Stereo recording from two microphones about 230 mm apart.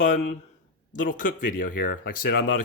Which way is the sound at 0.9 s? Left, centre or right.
Left.